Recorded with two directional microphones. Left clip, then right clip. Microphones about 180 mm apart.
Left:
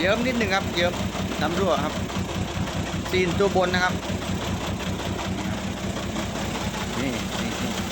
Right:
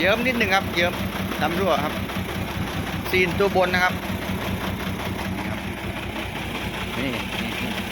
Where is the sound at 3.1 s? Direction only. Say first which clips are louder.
Right 2 dB; centre (ahead or behind).